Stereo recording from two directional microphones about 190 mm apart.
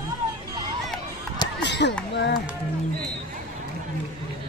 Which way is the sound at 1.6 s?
65° left (ahead or behind).